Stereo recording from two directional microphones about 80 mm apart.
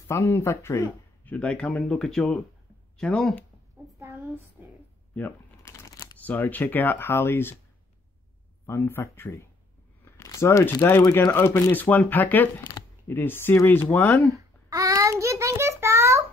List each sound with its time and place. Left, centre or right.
0.3 s speech: left
1.2 s speech: centre
1.8 s speech: centre
4.0 s speech: right
5.6 s a sound: left
5.9 s shuffling cards: left
6.2 s speech: left
8.6 s speech: left
10.2 s a sound: left
10.8 s speech: left
14.3 s child singing: right